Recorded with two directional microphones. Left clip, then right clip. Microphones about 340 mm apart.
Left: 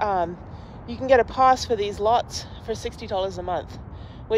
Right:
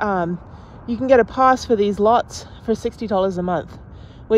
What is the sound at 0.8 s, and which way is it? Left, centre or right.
A woman's voice, centre.